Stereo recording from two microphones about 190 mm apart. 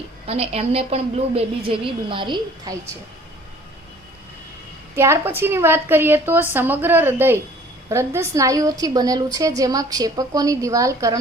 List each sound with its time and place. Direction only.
0.3 s a woman's voice: 30° right (ahead or behind)
4.9 s a woman's voice: 15° right (ahead or behind)